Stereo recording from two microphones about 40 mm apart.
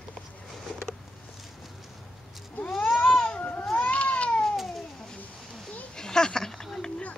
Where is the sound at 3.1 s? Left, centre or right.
Left.